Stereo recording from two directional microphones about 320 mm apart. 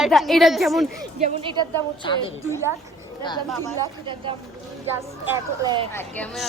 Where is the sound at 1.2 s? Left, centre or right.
Centre.